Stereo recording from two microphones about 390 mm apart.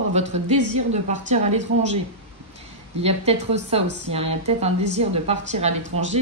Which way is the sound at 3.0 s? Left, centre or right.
Centre.